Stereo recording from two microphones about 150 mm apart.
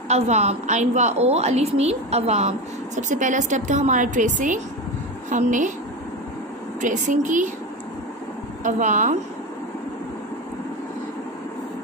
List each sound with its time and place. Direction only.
0.1 s a woman's voice: 45° right (ahead or behind)
3.0 s a woman's voice: 55° right (ahead or behind)
6.8 s a woman's voice: 55° right (ahead or behind)
8.6 s a woman's voice: 55° right (ahead or behind)